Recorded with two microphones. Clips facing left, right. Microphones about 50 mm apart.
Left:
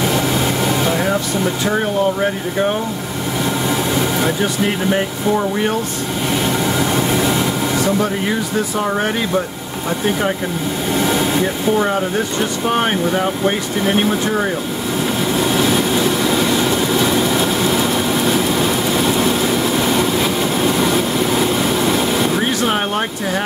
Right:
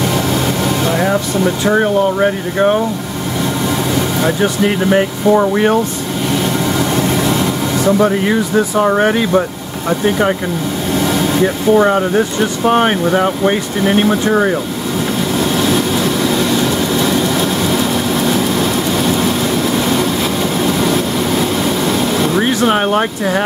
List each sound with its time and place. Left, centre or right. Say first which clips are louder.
0.0 s air conditioning: right 2 dB; centre
1.7 s speech: right 5 dB; centre
3.7 s vehicle: right 2 dB; centre
4.4 s speech: right 4 dB; centre
5.3 s speech: right 6 dB; right
6.3 s vehicle: right 2 dB; centre
7.8 s speech: right 8 dB; centre
11.0 s vehicle: right 2 dB; centre
11.7 s speech: right 8 dB; right
15.3 s vehicle: right 2 dB; centre
22.4 s speech: right 4 dB; centre